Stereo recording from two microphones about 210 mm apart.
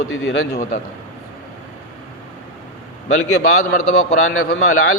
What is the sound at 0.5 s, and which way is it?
Speech, 40° left (ahead or behind).